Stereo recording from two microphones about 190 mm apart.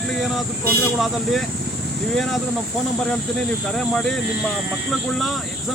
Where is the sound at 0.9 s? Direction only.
Centre (ahead or behind).